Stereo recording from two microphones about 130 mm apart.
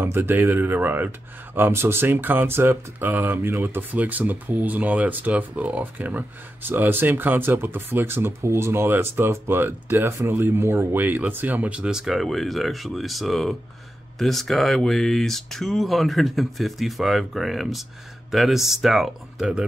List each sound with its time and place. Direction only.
0.0 s speech: 15° right (ahead or behind)